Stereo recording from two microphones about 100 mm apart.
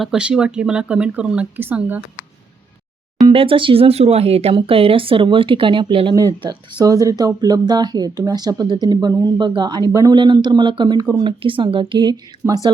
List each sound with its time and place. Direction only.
0.0 s speech: 5° right (ahead or behind)
3.3 s speech: 60° right (ahead or behind); by 4.5 s 90° right
4.5 s speech: 65° right (ahead or behind); by 10.2 s 40° right (ahead or behind)
10.2 s speech: 50° right (ahead or behind)
11.2 s speech: 55° right (ahead or behind)
12.1 s speech: 40° right (ahead or behind)